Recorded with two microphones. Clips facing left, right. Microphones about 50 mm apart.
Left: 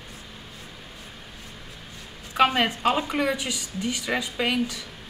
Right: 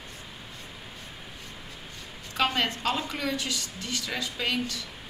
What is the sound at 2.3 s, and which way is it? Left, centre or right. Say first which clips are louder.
A woman's voice: left 6 dB; centre.